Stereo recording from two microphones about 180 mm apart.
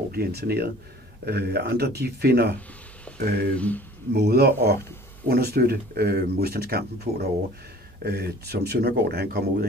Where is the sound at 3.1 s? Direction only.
5° left (ahead or behind).